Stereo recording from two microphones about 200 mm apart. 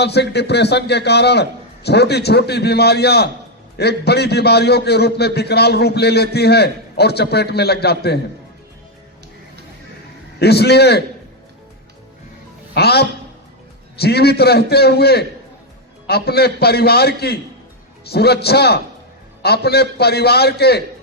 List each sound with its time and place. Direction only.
0.0 s a man's voice: 55° left (ahead or behind)
10.4 s a man's voice: 55° left (ahead or behind)
12.7 s a man's voice: 55° left (ahead or behind)